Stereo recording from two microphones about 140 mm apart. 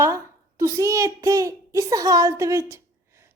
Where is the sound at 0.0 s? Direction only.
20° right (ahead or behind).